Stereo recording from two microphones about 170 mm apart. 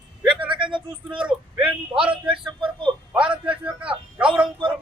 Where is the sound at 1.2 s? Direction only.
5° right (ahead or behind).